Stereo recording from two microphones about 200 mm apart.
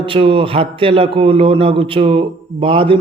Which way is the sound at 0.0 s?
25° right (ahead or behind).